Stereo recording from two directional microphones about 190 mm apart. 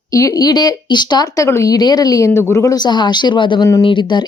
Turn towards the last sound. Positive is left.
turn(degrees=25)  # may be behind; listen again after turning